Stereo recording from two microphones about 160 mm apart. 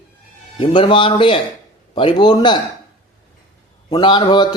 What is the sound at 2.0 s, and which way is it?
Speech, 30° left (ahead or behind).